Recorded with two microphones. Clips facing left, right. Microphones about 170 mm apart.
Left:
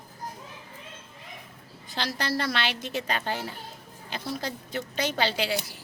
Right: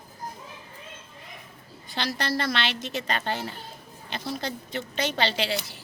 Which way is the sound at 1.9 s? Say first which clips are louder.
Right 1 dB; 5° left (ahead or behind).